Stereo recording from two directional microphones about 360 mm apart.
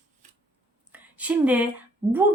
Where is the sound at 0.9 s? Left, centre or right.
Centre.